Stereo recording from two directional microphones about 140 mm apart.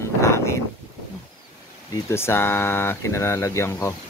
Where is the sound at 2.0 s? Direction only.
15° left (ahead or behind).